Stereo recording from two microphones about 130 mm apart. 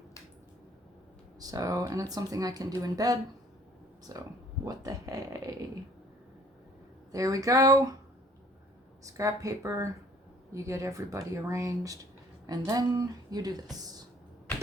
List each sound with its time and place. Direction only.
1.4 s speech: 30° right (ahead or behind)
7.1 s speech: 25° right (ahead or behind)
9.0 s speech: 25° right (ahead or behind)